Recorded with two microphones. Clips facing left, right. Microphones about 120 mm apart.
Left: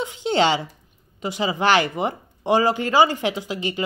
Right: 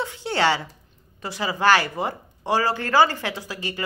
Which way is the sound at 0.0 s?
20° left (ahead or behind).